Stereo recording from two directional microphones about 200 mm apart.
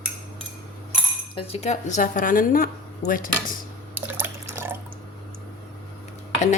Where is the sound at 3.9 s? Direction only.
10° right (ahead or behind).